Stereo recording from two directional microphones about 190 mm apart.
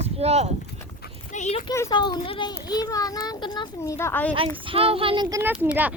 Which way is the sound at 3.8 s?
15° left (ahead or behind).